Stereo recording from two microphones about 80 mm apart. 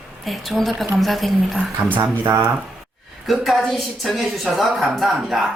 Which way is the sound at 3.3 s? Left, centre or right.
Centre.